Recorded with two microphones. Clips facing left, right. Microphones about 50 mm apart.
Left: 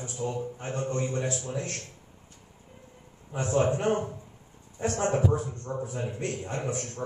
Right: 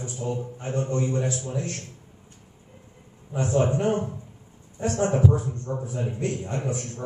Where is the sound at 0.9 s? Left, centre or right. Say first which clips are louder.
Right 4 dB; centre.